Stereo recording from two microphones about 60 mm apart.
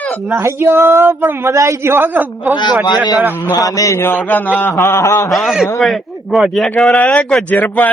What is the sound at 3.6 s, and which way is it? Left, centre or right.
Speech, left.